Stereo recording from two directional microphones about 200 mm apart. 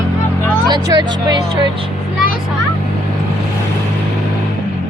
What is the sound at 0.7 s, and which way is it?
Speech, 20° right (ahead or behind).